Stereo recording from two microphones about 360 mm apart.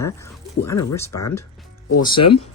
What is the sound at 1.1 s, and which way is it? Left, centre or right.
Speech, left.